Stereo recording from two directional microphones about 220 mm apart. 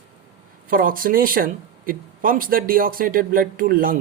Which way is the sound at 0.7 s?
40° right (ahead or behind).